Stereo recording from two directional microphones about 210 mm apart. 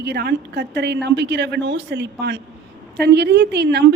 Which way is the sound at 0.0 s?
50° right (ahead or behind).